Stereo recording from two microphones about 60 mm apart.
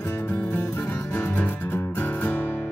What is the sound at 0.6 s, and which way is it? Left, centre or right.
Music, left.